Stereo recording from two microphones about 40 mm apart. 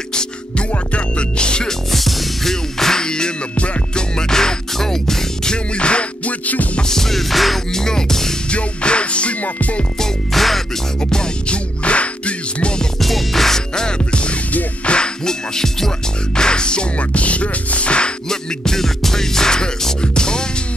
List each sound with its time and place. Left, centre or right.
0.1 s music: centre
1.7 s music: centre; by 4.0 s left
4.2 s music: centre
5.8 s music: left
6.4 s music: left
6.8 s music: centre
7.7 s music: centre
8.5 s music: left
9.9 s music: centre
11.1 s music: left
13.0 s music: centre; by 18.1 s left
18.3 s music: centre